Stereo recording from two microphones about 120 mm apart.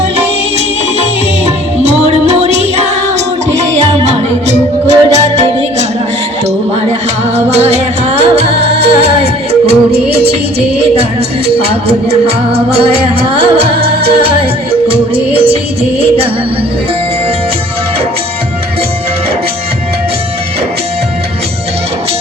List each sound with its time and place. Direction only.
1.8 s music: 65° right (ahead or behind)
4.0 s music: 70° right (ahead or behind)
7.5 s music: 65° right (ahead or behind)
11.4 s music: 55° right (ahead or behind)